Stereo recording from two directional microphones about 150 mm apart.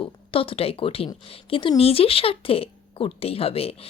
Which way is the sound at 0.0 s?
35° left (ahead or behind).